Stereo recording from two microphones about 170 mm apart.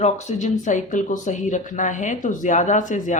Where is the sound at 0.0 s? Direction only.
45° left (ahead or behind).